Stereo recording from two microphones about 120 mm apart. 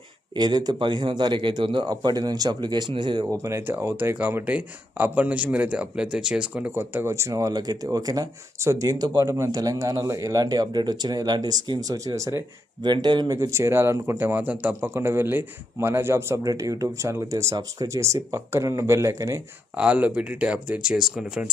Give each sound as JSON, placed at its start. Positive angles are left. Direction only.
{"t": 0.3, "sound": "speech", "side_deg": -35}
{"t": 3.3, "sound": "speech", "side_deg": -25}
{"t": 12.8, "sound": "speech", "side_deg": -40}
{"t": 19.7, "sound": "speech", "side_deg": -10}